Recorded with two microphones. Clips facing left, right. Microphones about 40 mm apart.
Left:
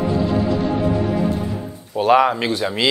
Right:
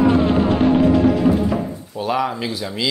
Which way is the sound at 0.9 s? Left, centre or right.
Right.